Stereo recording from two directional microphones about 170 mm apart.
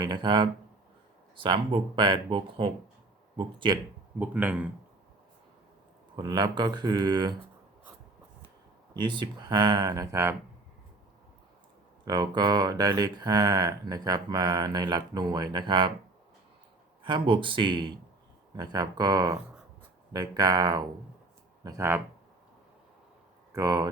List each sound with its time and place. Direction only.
0.0 s speech: 25° right (ahead or behind)
4.2 s speech: 10° right (ahead or behind)
6.1 s speech: 25° right (ahead or behind)
9.0 s speech: 25° right (ahead or behind)
12.0 s speech: 25° right (ahead or behind)
17.0 s speech: 30° right (ahead or behind)
23.6 s speech: 20° right (ahead or behind)